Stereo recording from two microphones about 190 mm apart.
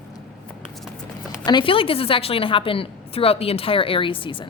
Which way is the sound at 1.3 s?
25° left (ahead or behind).